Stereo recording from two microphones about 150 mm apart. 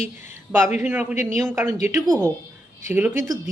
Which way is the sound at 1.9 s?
5° left (ahead or behind).